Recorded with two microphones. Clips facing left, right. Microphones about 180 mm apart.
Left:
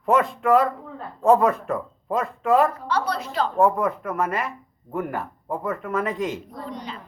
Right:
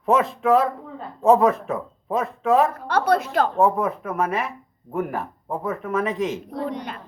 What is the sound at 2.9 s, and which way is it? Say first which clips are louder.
Speech: right 5 dB; 55° right (ahead or behind).